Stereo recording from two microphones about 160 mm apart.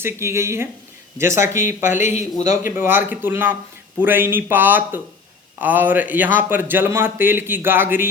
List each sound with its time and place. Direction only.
0.0 s speech: 15° right (ahead or behind)
1.8 s a man's voice: 50° left (ahead or behind)
2.7 s speech: 15° right (ahead or behind)